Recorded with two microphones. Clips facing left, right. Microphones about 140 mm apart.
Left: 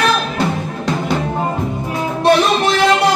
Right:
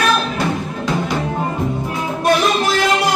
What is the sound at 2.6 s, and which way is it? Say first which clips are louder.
Music: left 3 dB; 25° left (ahead or behind).